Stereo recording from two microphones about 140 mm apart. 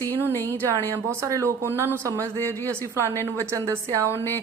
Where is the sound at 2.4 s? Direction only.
15° left (ahead or behind).